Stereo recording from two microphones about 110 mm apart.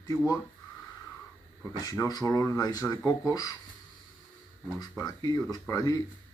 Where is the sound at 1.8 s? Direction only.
35° left (ahead or behind).